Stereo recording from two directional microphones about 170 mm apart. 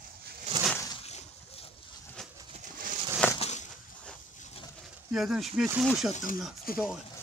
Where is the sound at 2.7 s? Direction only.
55° right (ahead or behind).